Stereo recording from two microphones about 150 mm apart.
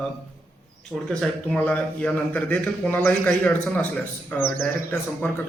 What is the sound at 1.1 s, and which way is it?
Speech, 5° left (ahead or behind).